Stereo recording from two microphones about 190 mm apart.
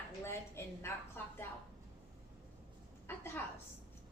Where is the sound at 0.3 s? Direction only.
15° left (ahead or behind).